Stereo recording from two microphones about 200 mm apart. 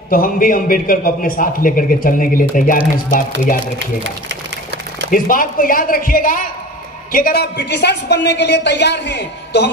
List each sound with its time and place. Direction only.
0.1 s a man's voice: 45° left (ahead or behind)
5.1 s a man's voice: 45° left (ahead or behind)